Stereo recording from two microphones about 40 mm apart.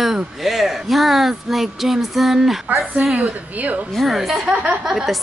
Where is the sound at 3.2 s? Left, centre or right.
Right.